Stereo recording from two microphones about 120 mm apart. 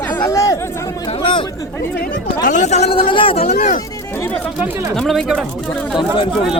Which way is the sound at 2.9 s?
50° left (ahead or behind).